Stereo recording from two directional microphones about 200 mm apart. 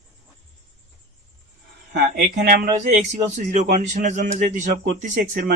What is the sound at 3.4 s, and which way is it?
A man's voice, 35° right (ahead or behind).